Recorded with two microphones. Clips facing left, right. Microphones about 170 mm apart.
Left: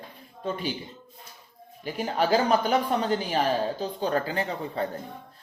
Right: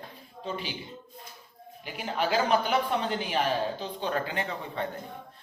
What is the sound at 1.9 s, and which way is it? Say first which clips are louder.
Speech: left 5 dB; 40° left (ahead or behind).